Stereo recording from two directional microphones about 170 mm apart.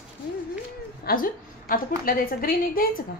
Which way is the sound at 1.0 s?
55° left (ahead or behind).